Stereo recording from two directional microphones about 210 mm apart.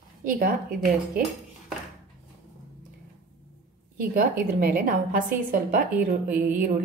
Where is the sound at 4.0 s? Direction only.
45° right (ahead or behind).